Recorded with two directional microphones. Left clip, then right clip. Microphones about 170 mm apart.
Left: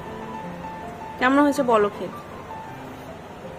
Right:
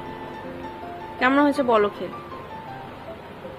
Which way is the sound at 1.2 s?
10° left (ahead or behind).